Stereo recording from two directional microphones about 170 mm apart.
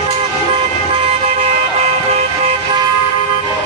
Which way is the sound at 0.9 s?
40° right (ahead or behind).